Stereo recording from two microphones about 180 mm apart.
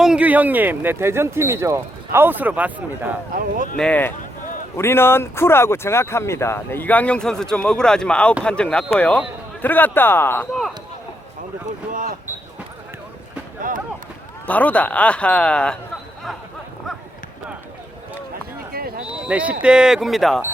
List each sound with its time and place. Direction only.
0.0 s speech: 5° right (ahead or behind)
3.8 s speech: 5° left (ahead or behind)
11.9 s speech: 50° right (ahead or behind)
13.6 s run: 50° right (ahead or behind)
14.4 s speech: 10° left (ahead or behind)
18.7 s a sound: 55° right (ahead or behind)
19.2 s speech: 5° right (ahead or behind)